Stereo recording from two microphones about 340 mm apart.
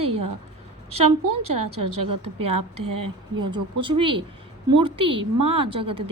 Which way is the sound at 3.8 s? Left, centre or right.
Centre.